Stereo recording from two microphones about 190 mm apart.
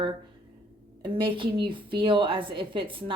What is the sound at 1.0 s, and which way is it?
A woman's voice, 25° right (ahead or behind).